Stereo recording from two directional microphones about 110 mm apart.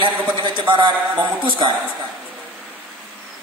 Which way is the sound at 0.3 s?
45° right (ahead or behind).